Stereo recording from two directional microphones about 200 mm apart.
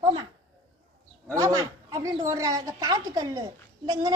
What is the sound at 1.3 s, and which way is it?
A woman's voice, 15° right (ahead or behind).